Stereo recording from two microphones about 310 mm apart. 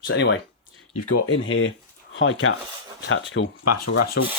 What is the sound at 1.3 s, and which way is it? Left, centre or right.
Speech, left.